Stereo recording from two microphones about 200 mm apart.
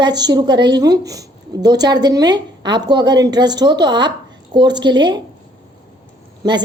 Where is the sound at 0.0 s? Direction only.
20° right (ahead or behind).